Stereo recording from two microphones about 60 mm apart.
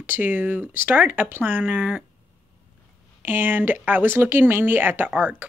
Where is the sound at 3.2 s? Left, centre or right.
Right.